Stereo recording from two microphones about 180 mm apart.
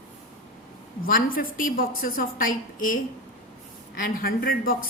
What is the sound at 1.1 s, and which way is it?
A woman's voice, 50° left (ahead or behind).